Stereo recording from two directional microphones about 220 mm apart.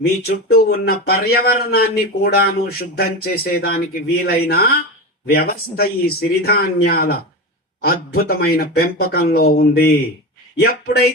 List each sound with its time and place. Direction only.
0.2 s speech: 45° left (ahead or behind)